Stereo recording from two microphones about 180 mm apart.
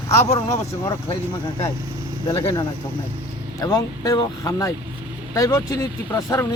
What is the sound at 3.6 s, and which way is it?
Speech, 20° left (ahead or behind).